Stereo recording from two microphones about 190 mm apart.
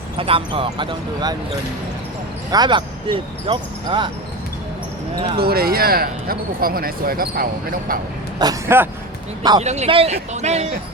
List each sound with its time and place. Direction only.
0.2 s speech: 30° right (ahead or behind)
2.5 s speech: 25° right (ahead or behind)
5.4 s speech: 55° right (ahead or behind)
8.4 s speech: 15° right (ahead or behind)
9.6 s speech: 35° right (ahead or behind)